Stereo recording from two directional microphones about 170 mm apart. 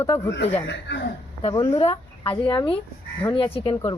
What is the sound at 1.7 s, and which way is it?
Speech, 35° left (ahead or behind).